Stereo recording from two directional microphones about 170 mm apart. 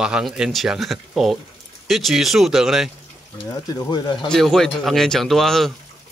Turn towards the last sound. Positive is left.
turn(degrees=0)  # may be behind; listen again after turning